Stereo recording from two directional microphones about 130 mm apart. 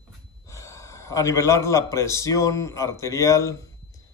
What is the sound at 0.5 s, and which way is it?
A man's voice, 25° left (ahead or behind).